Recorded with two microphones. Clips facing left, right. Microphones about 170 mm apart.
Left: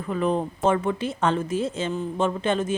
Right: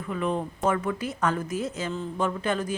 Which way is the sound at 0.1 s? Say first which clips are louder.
Left 4 dB; 35° left (ahead or behind).